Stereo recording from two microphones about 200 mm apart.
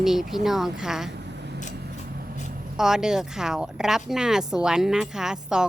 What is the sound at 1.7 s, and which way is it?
Vehicle, 50° right (ahead or behind).